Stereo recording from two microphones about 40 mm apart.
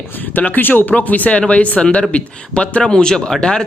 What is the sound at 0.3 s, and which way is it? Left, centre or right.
Speech, left.